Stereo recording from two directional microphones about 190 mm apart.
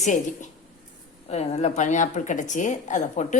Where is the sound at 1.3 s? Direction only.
35° left (ahead or behind).